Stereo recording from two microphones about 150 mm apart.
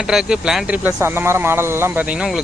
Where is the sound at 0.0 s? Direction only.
5° right (ahead or behind).